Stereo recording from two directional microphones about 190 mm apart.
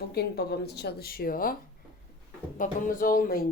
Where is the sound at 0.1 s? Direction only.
60° left (ahead or behind).